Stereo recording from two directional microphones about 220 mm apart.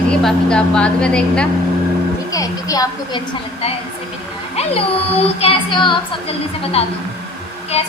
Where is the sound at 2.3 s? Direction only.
15° left (ahead or behind).